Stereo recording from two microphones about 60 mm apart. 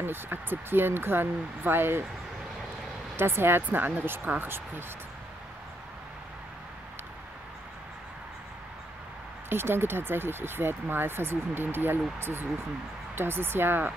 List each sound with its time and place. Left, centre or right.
0.0 s speech: right
3.2 s speech: right
9.5 s speech: right